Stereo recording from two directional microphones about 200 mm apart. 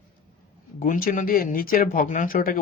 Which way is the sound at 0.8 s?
45° left (ahead or behind).